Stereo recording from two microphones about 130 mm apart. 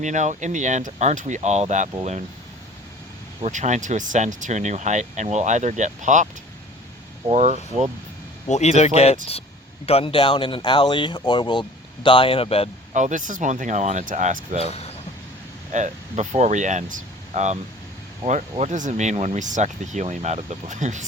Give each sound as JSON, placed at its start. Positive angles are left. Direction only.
{"t": 0.0, "sound": "speech", "side_deg": -65}
{"t": 3.4, "sound": "speech", "side_deg": -65}
{"t": 7.3, "sound": "speech", "side_deg": -60}
{"t": 8.4, "sound": "speech", "side_deg": 60}
{"t": 12.9, "sound": "speech", "side_deg": -70}
{"t": 14.6, "sound": "speech", "side_deg": 50}
{"t": 15.7, "sound": "speech", "side_deg": -70}